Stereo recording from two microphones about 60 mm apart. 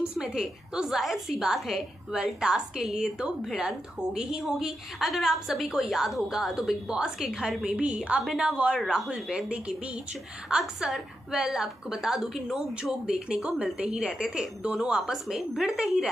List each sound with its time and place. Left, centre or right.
0.3 s a woman's voice: centre
10.8 s a woman's voice: centre